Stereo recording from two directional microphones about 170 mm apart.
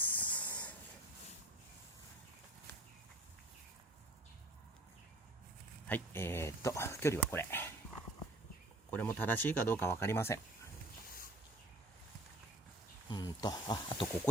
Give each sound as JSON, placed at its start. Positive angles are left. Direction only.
{"t": 0.0, "sound": "hiss", "side_deg": 10}
{"t": 5.9, "sound": "speech", "side_deg": 15}
{"t": 8.9, "sound": "speech", "side_deg": 10}
{"t": 13.1, "sound": "a sound", "side_deg": 25}